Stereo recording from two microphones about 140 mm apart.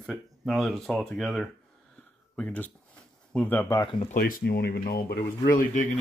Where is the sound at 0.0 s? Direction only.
Centre (ahead or behind); by 3.8 s 20° left (ahead or behind).